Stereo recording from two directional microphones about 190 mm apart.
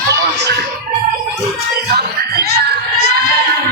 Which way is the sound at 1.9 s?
55° right (ahead or behind).